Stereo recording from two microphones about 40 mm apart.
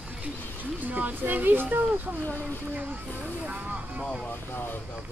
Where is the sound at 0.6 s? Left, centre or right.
Right.